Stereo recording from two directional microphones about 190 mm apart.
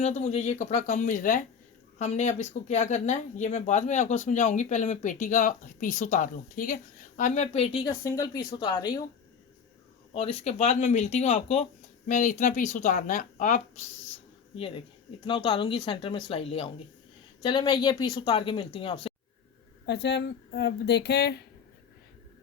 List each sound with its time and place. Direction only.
0.0 s speech: 35° left (ahead or behind)
7.9 s speech: 20° left (ahead or behind)
10.1 s speech: 30° left (ahead or behind)
14.5 s speech: 30° left (ahead or behind)
19.8 s speech: 65° left (ahead or behind)